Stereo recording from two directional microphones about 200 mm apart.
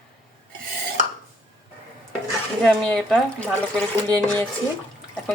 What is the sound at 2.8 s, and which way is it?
Speech, 5° left (ahead or behind).